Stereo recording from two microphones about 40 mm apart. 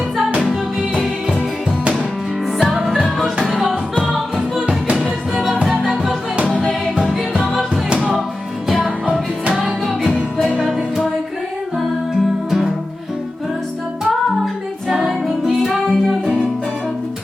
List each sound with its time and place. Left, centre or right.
4.6 s music: right
10.0 s music: right
12.5 s music: centre
14.8 s music: centre
15.5 s music: centre